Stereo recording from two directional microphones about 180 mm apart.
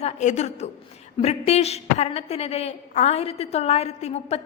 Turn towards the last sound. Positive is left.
turn(degrees=35)  # may be behind; listen again after turning